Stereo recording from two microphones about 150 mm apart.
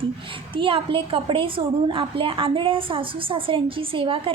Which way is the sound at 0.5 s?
35° right (ahead or behind).